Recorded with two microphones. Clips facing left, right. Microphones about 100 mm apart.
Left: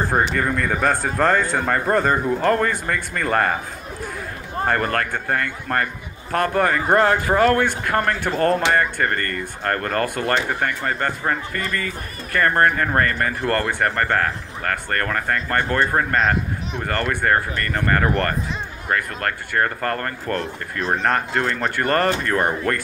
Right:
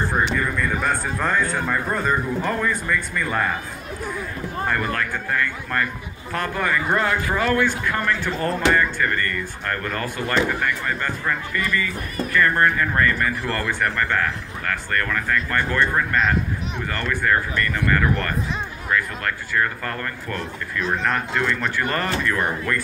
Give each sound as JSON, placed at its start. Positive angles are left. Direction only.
{"t": 0.4, "sound": "speech", "side_deg": 70}
{"t": 4.6, "sound": "speech", "side_deg": 50}